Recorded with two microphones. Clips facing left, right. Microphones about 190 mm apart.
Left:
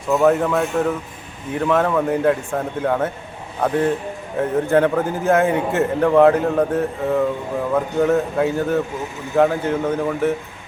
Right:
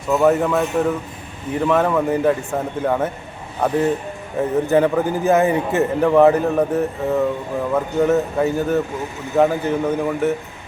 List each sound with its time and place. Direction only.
0.1 s a man's voice: 5° right (ahead or behind)